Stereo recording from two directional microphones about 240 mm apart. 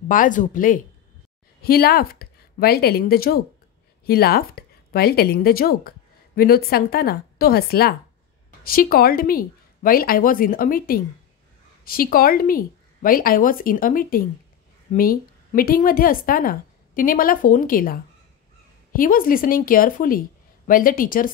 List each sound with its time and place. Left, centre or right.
0.1 s a woman's voice: left